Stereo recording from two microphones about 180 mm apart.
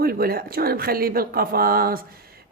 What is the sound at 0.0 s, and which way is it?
Speech, 55° right (ahead or behind).